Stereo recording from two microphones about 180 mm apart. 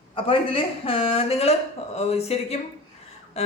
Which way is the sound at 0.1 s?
30° left (ahead or behind).